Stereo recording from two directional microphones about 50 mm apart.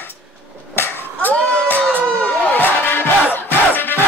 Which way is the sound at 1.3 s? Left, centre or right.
Right.